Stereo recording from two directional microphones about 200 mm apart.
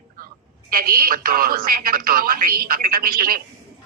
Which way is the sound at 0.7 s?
45° right (ahead or behind).